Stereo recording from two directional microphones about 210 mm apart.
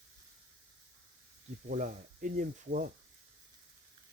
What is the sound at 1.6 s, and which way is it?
Speech, 40° right (ahead or behind).